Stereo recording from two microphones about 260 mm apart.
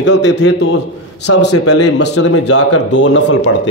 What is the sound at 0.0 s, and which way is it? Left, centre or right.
Speech, left.